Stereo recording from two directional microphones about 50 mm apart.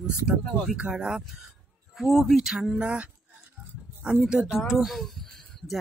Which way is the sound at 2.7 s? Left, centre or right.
Right.